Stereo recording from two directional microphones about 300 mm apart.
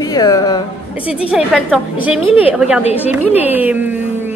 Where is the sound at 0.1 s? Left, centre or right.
Centre.